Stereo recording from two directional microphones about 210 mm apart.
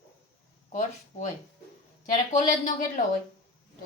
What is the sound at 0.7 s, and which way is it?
Speech, 35° left (ahead or behind).